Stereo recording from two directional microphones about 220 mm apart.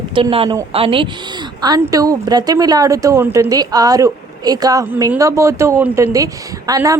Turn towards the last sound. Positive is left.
turn(degrees=-15)  # may be behind; listen again after turning